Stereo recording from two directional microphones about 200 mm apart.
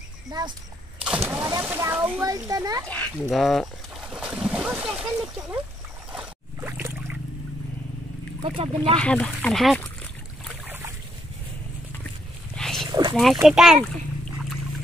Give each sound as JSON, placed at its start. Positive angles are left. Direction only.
{"t": 0.3, "sound": "speech", "side_deg": -20}
{"t": 1.0, "sound": "speech", "side_deg": -10}
{"t": 3.2, "sound": "a sound", "side_deg": 0}
{"t": 8.5, "sound": "speech", "side_deg": -30}
{"t": 8.9, "sound": "speech", "side_deg": 5}
{"t": 10.7, "sound": "boat", "side_deg": -15}
{"t": 12.5, "sound": "a sound", "side_deg": 0}
{"t": 12.8, "sound": "oink", "side_deg": -20}
{"t": 13.1, "sound": "speech", "side_deg": 0}